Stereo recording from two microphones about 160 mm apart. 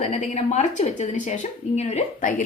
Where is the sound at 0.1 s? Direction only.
45° left (ahead or behind).